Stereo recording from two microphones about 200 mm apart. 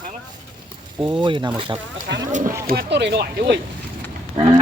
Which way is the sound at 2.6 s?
50° right (ahead or behind).